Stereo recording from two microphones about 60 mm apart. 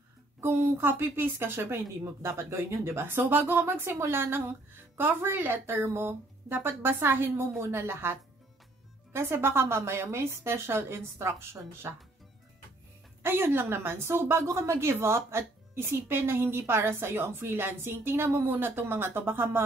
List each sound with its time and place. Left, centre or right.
0.4 s a woman's voice: right
13.2 s a woman's voice: right